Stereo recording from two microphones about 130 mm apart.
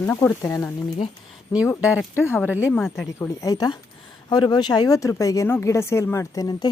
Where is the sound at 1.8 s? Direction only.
10° right (ahead or behind).